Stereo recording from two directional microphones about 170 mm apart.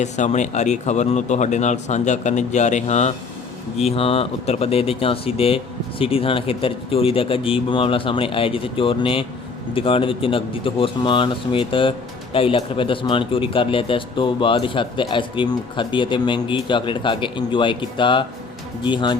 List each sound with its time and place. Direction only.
0.0 s a man's voice: 45° left (ahead or behind); by 19.1 s 25° left (ahead or behind)